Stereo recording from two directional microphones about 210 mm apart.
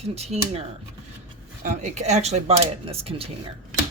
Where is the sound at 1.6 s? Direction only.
35° right (ahead or behind).